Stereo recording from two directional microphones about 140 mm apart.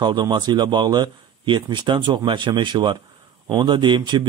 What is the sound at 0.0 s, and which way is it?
A man's voice, 35° right (ahead or behind).